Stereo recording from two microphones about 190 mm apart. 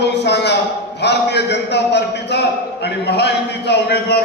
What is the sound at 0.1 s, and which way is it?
A man's voice, 65° left (ahead or behind).